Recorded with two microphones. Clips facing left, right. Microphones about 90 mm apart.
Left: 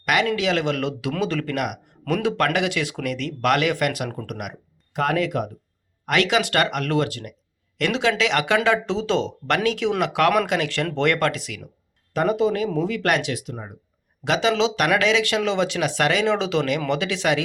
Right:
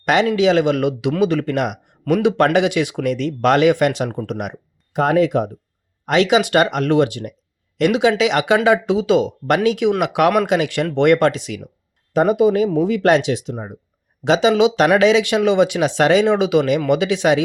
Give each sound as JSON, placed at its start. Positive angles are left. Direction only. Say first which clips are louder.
{"t": 0.0, "sound": "speech", "louder": "right 6 dB", "side_deg": -25}